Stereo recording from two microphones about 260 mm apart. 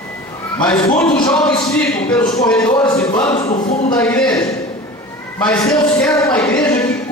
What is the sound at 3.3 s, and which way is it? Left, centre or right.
Speech, left.